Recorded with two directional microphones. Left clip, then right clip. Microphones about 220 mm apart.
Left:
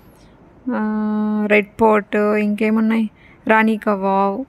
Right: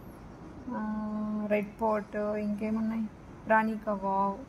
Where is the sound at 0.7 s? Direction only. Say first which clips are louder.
Left 14 dB; 50° left (ahead or behind).